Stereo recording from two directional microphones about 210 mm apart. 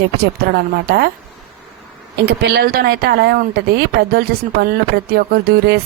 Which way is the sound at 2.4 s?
50° right (ahead or behind).